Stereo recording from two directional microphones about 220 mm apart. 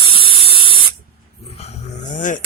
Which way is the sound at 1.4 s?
30° left (ahead or behind).